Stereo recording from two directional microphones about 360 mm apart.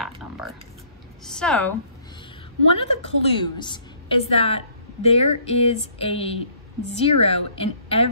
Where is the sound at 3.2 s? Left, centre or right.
Centre.